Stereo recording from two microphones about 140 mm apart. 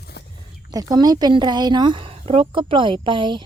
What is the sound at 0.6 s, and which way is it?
A woman's voice, 25° right (ahead or behind).